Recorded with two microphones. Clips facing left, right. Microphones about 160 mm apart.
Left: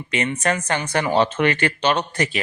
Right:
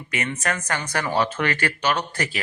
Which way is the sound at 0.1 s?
25° left (ahead or behind).